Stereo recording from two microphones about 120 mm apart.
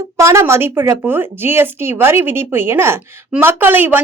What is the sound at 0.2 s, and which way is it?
Speech, 25° right (ahead or behind).